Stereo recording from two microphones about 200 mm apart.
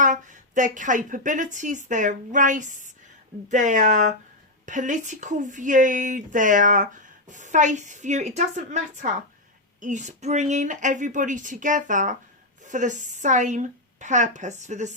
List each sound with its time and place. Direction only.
0.0 s a woman's voice: 40° right (ahead or behind)